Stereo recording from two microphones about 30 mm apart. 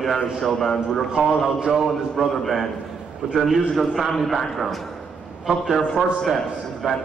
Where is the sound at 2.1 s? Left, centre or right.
Centre.